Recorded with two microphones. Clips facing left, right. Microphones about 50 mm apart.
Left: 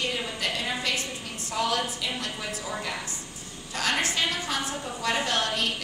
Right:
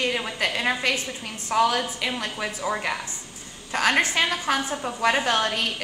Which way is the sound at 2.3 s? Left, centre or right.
Right.